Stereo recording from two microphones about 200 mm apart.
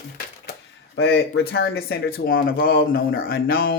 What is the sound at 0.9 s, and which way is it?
Speech, 65° left (ahead or behind).